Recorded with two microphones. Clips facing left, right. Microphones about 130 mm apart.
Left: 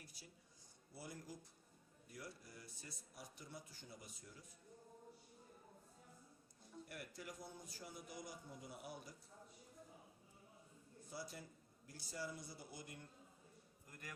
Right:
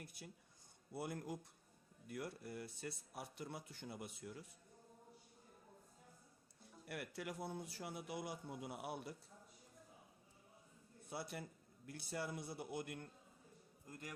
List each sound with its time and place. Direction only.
0.0 s a sound: 55° right (ahead or behind)
0.9 s speech: 60° right (ahead or behind)
6.8 s speech: 65° right (ahead or behind)
11.1 s speech: 60° right (ahead or behind)
13.8 s a man's voice: 25° right (ahead or behind)